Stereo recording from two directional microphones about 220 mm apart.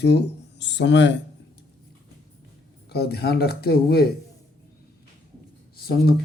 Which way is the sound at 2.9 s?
45° left (ahead or behind).